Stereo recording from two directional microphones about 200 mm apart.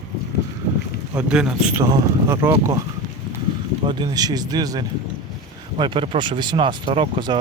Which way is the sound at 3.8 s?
20° right (ahead or behind).